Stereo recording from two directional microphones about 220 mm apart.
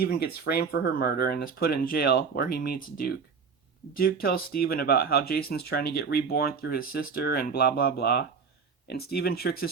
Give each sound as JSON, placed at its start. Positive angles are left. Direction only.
{"t": 0.0, "sound": "speech", "side_deg": 45}